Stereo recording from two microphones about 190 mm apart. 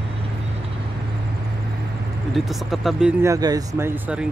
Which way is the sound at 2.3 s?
Centre (ahead or behind).